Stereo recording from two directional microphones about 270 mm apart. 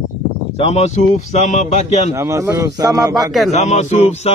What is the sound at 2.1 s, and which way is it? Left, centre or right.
A man's voice, centre.